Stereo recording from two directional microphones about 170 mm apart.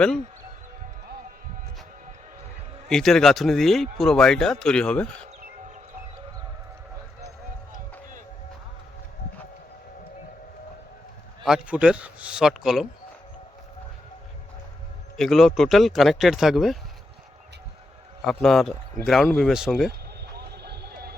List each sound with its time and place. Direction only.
2.9 s speech: centre (ahead or behind)
11.4 s speech: 5° right (ahead or behind)
15.1 s speech: centre (ahead or behind)
18.3 s speech: centre (ahead or behind)
20.6 s vehicle: 75° right (ahead or behind)